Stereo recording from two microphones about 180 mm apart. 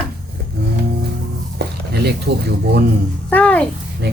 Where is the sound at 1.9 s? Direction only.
65° right (ahead or behind).